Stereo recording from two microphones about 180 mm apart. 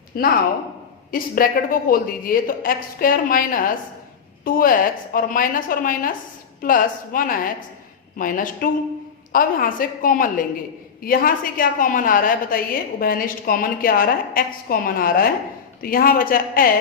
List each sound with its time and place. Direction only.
0.1 s a woman's voice: 55° left (ahead or behind)